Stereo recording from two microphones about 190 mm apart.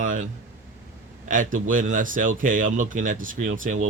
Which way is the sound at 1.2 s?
45° right (ahead or behind).